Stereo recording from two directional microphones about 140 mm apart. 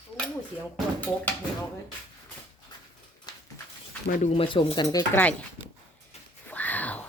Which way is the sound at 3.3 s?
30° left (ahead or behind).